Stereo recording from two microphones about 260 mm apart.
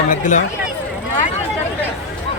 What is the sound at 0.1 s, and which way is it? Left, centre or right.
Speech, left.